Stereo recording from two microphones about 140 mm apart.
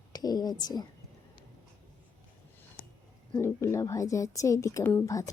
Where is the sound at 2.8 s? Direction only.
85° left.